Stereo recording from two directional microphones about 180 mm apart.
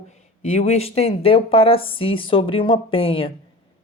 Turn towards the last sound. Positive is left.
turn(degrees=30)  # may be behind; listen again after turning